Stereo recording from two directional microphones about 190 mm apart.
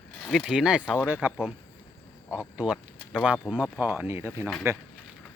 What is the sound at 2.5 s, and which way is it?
Speech, 5° right (ahead or behind).